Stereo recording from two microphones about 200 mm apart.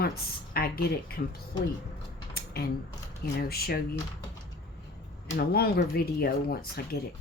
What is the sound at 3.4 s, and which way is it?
Speech, 50° left (ahead or behind).